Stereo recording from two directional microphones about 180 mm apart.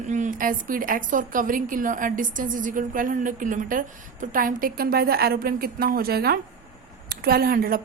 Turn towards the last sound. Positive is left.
turn(degrees=-55)  # may be behind; listen again after turning